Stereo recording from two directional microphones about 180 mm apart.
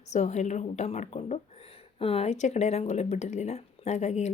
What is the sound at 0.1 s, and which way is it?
Speech, 40° left (ahead or behind).